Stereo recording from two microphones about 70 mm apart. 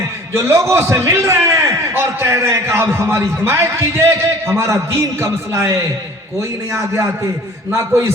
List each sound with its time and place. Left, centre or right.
0.3 s a man's voice: right